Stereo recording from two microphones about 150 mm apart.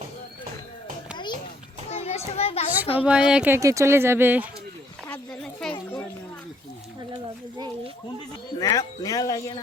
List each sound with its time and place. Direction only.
1.1 s children playing: 30° left (ahead or behind)
1.9 s children playing: 45° left (ahead or behind)
3.0 s speech: 5° right (ahead or behind)
3.6 s speech: 20° right (ahead or behind)
5.3 s a sound: 5° left (ahead or behind)
8.5 s speech: 25° left (ahead or behind)